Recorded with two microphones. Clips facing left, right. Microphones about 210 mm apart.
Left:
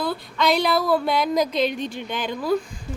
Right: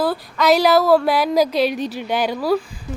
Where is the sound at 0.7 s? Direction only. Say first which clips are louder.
Right 7 dB; 70° right (ahead or behind).